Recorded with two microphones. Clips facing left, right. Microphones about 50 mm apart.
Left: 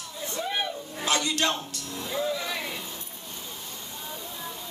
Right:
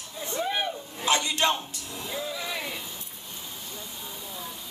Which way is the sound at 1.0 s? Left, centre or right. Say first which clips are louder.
Right 2 dB; centre.